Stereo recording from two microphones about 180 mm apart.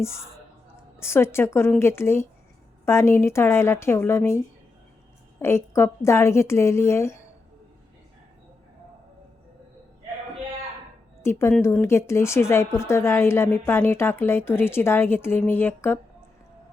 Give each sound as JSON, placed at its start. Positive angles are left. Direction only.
{"t": 0.0, "sound": "speech", "side_deg": 15}
{"t": 5.4, "sound": "speech", "side_deg": 15}
{"t": 11.2, "sound": "speech", "side_deg": 15}